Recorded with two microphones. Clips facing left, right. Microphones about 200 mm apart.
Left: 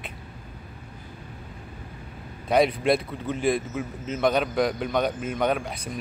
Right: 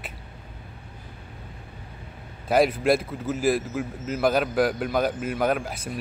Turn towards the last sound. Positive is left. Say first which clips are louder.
# right 1 dB
turn(degrees=-5)  # may be behind; listen again after turning